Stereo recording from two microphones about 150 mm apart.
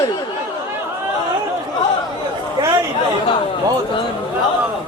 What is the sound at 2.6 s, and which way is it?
Chatter, 25° right (ahead or behind).